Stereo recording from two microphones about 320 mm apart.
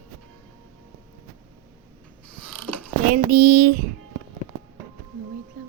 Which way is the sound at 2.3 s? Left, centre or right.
Centre.